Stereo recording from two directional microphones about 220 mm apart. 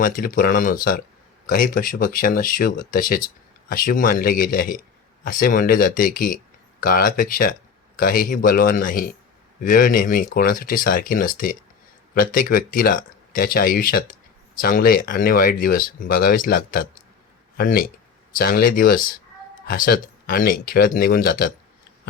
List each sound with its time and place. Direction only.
0.0 s a man's voice: 40° left (ahead or behind)